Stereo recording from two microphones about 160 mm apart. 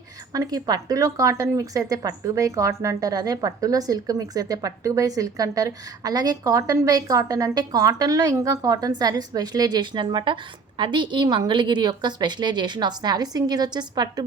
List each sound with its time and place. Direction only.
0.3 s speech: 25° right (ahead or behind)